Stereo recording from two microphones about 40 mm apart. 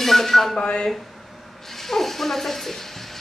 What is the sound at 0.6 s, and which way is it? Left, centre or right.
Speech, left.